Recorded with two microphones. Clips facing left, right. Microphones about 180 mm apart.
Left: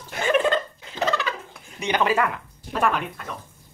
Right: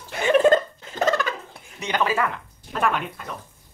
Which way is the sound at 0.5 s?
45° right (ahead or behind).